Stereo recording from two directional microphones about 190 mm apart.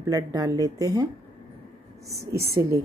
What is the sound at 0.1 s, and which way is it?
Speech, 20° right (ahead or behind).